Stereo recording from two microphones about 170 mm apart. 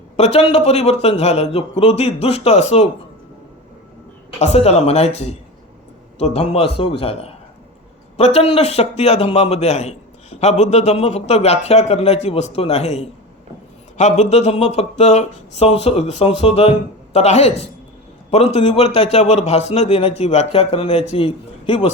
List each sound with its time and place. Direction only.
0.2 s a man's voice: 35° left (ahead or behind)
4.4 s a man's voice: 40° left (ahead or behind)